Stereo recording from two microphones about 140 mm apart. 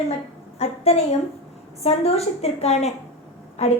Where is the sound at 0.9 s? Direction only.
45° left (ahead or behind).